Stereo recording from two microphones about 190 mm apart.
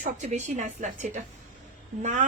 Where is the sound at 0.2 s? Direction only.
40° right (ahead or behind).